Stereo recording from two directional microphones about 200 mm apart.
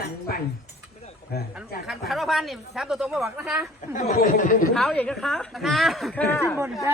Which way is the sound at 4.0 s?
40° left (ahead or behind).